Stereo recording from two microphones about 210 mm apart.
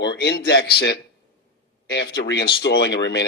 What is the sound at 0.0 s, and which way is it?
Speech, 50° left (ahead or behind).